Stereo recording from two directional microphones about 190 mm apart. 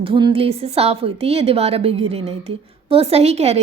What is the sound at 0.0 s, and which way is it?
A woman's voice, 25° right (ahead or behind).